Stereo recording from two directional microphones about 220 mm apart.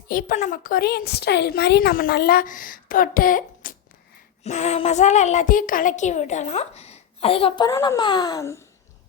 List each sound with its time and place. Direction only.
0.1 s a woman's voice: 40° left (ahead or behind); by 8.6 s 15° left (ahead or behind)